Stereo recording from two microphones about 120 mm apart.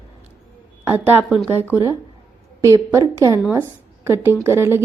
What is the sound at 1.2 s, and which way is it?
Speech, 5° left (ahead or behind).